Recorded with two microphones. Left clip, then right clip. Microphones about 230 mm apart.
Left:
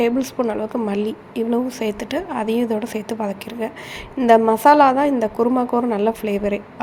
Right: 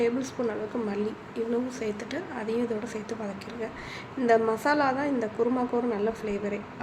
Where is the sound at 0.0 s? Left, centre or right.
Left.